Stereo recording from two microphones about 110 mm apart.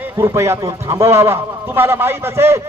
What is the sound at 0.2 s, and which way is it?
A man's voice, 25° right (ahead or behind).